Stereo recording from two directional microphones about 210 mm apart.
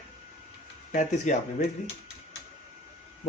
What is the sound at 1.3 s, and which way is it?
Speech, 35° left (ahead or behind).